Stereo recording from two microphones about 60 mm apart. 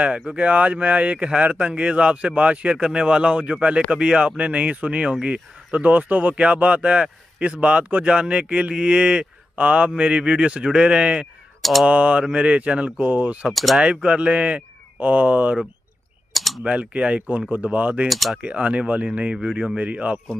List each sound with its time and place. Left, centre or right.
0.3 s speech: right
13.5 s speech: centre
13.7 s speech: centre
16.3 s typing: centre
16.6 s speech: right
18.0 s speech: centre
18.3 s speech: right